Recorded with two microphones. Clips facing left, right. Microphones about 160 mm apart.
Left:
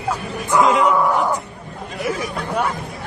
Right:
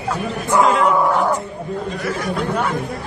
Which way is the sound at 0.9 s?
20° right (ahead or behind).